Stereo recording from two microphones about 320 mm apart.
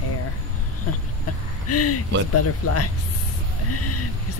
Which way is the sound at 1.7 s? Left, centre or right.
Left.